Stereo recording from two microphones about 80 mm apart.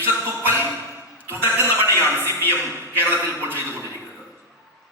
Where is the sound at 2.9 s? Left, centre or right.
Right.